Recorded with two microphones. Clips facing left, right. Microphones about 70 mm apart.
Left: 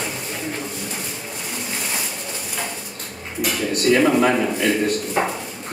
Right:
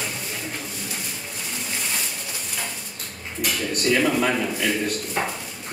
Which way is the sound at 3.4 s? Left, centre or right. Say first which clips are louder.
Left 4 dB; centre.